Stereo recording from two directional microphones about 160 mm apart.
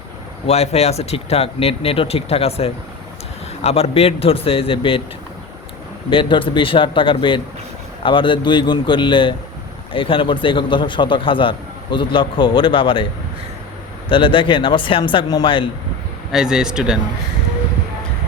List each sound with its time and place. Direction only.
0.4 s a man's voice: 40° left (ahead or behind)
6.1 s a man's voice: 30° left (ahead or behind)
14.1 s a man's voice: 30° left (ahead or behind)
16.3 s speech: 5° right (ahead or behind)